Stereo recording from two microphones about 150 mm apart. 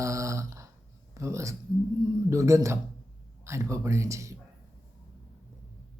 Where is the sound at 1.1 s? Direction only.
20° right (ahead or behind).